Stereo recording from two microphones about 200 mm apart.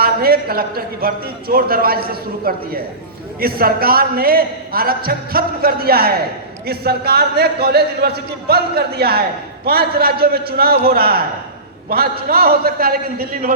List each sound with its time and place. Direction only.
0.0 s a man's voice: 50° right (ahead or behind)